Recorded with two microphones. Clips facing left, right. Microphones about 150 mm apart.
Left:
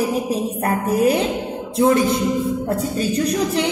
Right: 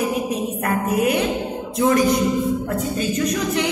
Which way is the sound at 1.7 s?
30° left (ahead or behind).